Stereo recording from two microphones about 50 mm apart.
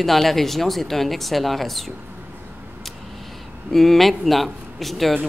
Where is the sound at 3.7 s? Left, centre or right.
Centre.